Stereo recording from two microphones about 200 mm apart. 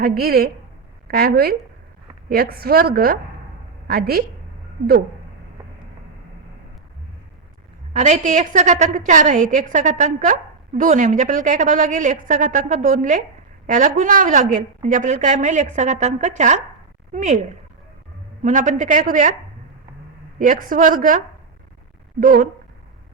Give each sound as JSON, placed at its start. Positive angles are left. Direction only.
{"t": 0.0, "sound": "a woman's voice", "side_deg": -50}
{"t": 7.9, "sound": "a woman's voice", "side_deg": -35}
{"t": 18.4, "sound": "a woman's voice", "side_deg": -40}
{"t": 20.4, "sound": "a woman's voice", "side_deg": -40}